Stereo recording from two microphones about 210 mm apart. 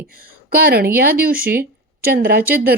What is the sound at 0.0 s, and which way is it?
A woman's voice, 45° right (ahead or behind).